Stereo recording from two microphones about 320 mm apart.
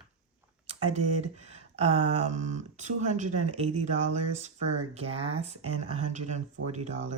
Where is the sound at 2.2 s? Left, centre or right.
Right.